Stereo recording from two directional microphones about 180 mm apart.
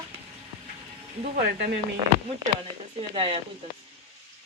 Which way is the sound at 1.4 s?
60° right (ahead or behind).